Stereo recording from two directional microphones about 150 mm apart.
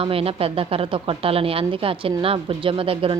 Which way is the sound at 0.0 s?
40° right (ahead or behind).